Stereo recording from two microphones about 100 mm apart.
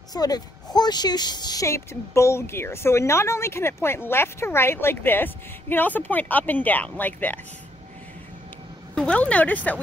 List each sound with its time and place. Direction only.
0.1 s a woman's voice: 40° left (ahead or behind)
1.7 s a woman's voice: 25° left (ahead or behind)
8.9 s speech: 10° left (ahead or behind)